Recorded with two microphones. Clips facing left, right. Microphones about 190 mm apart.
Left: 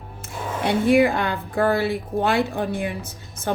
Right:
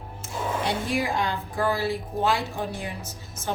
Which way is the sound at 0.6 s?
60° left (ahead or behind).